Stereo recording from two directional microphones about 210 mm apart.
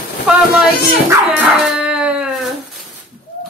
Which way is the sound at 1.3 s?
5° right (ahead or behind).